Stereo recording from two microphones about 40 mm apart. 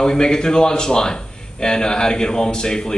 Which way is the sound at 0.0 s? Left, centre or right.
Centre.